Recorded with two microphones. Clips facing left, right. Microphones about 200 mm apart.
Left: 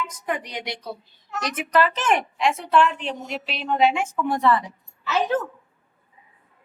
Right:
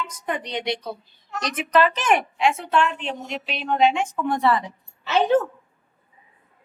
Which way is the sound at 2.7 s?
5° left (ahead or behind).